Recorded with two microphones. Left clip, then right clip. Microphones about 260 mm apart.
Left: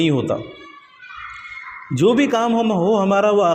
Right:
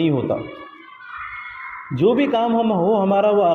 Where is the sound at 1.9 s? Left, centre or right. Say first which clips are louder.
Left 1 dB; left.